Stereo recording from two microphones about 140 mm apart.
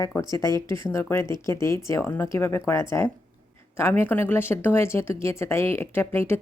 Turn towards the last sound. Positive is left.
turn(degrees=15)  # may be behind; listen again after turning